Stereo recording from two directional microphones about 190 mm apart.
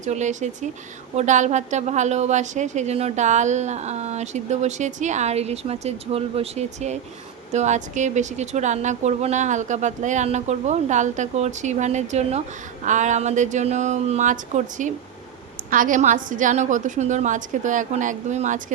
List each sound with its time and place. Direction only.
0.0 s a woman's voice: 40° right (ahead or behind)